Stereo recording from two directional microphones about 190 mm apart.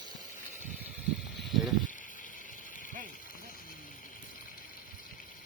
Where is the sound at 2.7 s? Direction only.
45° left (ahead or behind).